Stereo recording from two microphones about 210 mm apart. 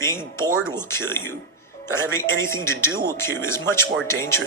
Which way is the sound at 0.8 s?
10° left (ahead or behind).